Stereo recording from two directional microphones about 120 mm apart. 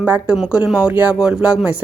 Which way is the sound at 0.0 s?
15° right (ahead or behind).